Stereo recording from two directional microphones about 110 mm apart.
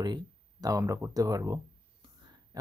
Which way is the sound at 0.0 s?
40° right (ahead or behind).